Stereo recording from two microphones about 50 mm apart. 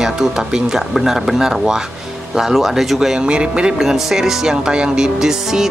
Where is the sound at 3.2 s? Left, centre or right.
Right.